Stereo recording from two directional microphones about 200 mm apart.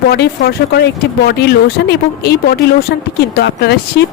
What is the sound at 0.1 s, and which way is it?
Speech, 55° left (ahead or behind).